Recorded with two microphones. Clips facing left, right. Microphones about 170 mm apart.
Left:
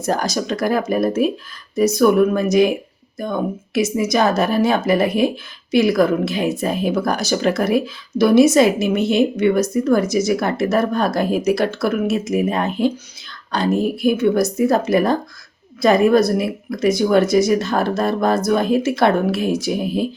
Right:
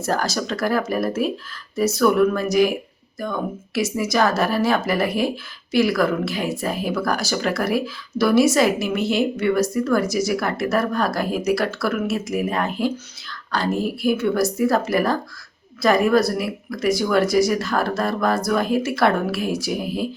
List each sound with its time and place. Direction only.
0.0 s a woman's voice: 20° left (ahead or behind)